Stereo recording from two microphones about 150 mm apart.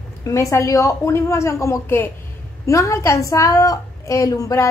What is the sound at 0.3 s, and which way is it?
A woman's voice, 20° left (ahead or behind).